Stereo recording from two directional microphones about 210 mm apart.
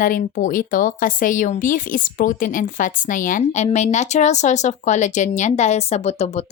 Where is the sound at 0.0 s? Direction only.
40° left (ahead or behind).